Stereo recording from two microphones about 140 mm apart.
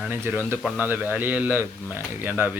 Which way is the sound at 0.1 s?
15° right (ahead or behind).